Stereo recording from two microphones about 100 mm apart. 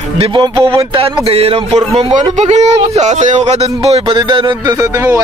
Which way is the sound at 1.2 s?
85° right.